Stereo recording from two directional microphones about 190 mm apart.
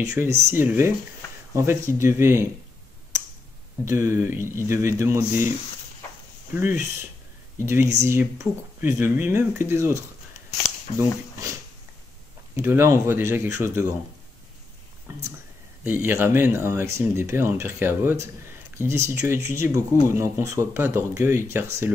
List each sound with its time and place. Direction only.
0.0 s speech: 15° right (ahead or behind)
3.8 s speech: 15° right (ahead or behind)
6.5 s speech: 10° right (ahead or behind)
12.5 s speech: 15° right (ahead or behind)
15.8 s speech: 10° right (ahead or behind)